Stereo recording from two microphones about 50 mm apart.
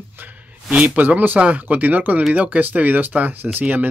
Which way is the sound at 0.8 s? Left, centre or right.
Right.